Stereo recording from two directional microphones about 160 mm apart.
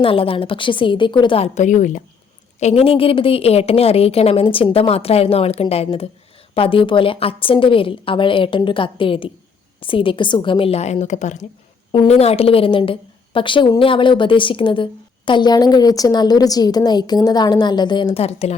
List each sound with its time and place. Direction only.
0.0 s a woman's voice: 35° left (ahead or behind)
1.5 s a woman's voice: 50° left (ahead or behind)
2.6 s a woman's voice: 40° left (ahead or behind)
11.9 s a woman's voice: 35° left (ahead or behind)